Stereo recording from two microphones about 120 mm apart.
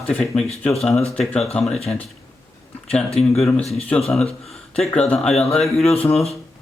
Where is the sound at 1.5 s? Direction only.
5° left (ahead or behind).